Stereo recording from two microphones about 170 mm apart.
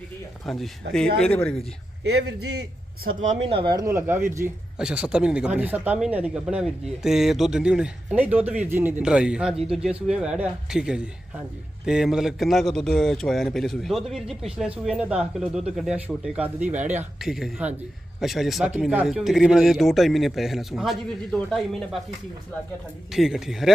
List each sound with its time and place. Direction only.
0.4 s speech: centre (ahead or behind)
2.0 s a man's voice: 75° right (ahead or behind)
3.4 s speech: 30° right (ahead or behind); by 17.1 s 10° right (ahead or behind)
17.2 s speech: centre (ahead or behind)
23.1 s speech: centre (ahead or behind)